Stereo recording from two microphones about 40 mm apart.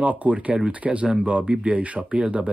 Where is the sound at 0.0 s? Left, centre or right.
Right.